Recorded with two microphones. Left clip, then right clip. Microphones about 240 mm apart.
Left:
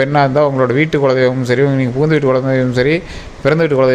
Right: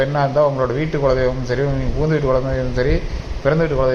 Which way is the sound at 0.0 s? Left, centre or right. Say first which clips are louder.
Left 4 dB; left.